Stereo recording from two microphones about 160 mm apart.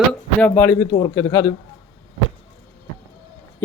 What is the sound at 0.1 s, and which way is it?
A man's voice, 10° left (ahead or behind).